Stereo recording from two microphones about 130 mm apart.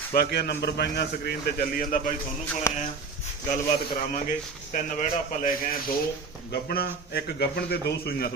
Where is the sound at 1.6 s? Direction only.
90° left.